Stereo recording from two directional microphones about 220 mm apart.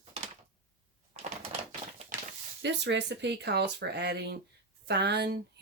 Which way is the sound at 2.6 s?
50° right (ahead or behind).